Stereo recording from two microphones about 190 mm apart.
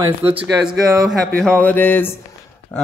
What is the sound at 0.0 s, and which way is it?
Speech, 10° right (ahead or behind).